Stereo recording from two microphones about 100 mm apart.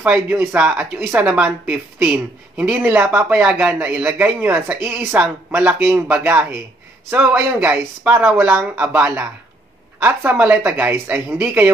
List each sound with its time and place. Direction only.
0.0 s speech: 15° right (ahead or behind)